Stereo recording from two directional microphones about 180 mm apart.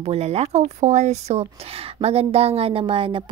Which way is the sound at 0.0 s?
35° right (ahead or behind).